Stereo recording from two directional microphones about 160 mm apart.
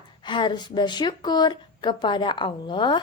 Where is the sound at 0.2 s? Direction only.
30° left (ahead or behind).